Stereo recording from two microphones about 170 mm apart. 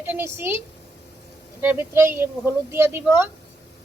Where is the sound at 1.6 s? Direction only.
15° right (ahead or behind).